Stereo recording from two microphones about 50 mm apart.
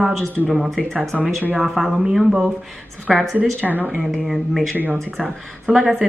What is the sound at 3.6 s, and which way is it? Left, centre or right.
Speech, right.